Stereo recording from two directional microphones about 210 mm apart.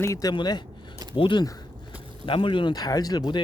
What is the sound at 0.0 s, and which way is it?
Speech, 15° left (ahead or behind).